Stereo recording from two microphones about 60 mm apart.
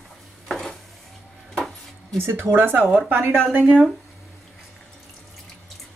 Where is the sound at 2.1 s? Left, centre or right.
Right.